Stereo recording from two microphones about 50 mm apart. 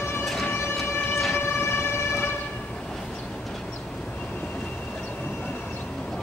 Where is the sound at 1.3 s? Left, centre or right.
Left.